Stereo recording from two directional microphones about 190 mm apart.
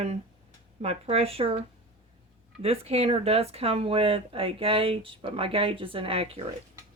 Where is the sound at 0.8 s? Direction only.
30° right (ahead or behind).